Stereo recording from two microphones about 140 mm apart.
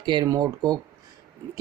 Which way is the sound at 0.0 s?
30° right (ahead or behind).